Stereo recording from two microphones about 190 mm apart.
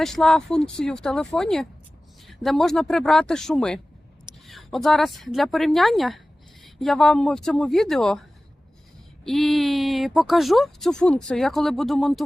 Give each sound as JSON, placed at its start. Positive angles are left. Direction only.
{"t": 0.0, "sound": "a woman's voice", "side_deg": 0}
{"t": 9.2, "sound": "speech", "side_deg": 0}